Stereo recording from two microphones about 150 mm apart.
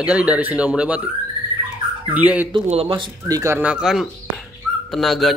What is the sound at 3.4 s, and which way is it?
Speech, 15° right (ahead or behind).